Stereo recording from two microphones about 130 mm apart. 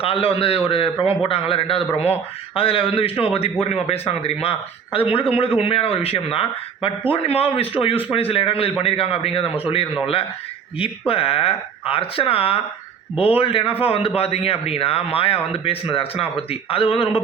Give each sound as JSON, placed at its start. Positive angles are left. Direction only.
{"t": 0.0, "sound": "a man's voice", "side_deg": 45}